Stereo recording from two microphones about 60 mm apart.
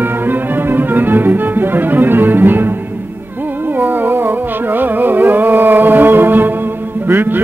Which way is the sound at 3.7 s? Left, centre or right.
Right.